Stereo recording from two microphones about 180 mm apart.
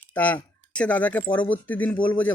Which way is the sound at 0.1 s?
10° left (ahead or behind).